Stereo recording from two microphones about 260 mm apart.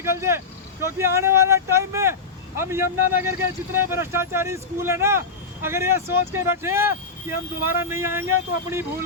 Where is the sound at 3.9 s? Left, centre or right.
Centre.